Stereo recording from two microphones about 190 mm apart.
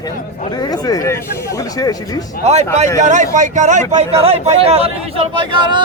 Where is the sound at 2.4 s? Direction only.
35° right (ahead or behind).